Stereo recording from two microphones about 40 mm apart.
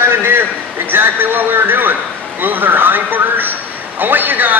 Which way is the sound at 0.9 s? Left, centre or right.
Right.